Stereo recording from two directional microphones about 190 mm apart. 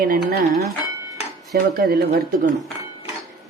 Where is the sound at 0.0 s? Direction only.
50° right (ahead or behind).